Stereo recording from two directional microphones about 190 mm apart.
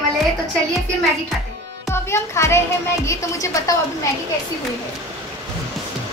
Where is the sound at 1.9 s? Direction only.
15° left (ahead or behind).